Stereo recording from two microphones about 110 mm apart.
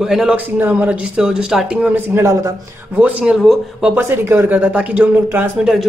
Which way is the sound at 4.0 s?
20° right (ahead or behind).